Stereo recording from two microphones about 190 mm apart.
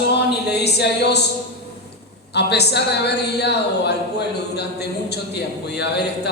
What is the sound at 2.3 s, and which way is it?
A woman's voice, 60° left (ahead or behind).